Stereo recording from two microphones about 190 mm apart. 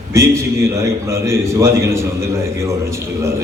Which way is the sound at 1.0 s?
15° right (ahead or behind).